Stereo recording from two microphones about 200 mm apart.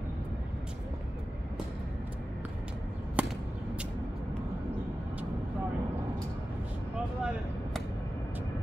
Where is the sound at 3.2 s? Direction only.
5° right (ahead or behind).